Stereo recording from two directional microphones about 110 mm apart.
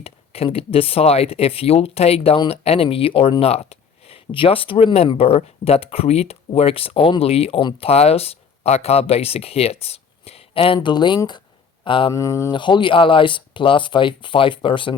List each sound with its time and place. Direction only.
0.0 s speech: 60° left (ahead or behind)
10.8 s speech: 45° left (ahead or behind)
12.1 s speech: 30° left (ahead or behind)
12.5 s speech: 45° left (ahead or behind)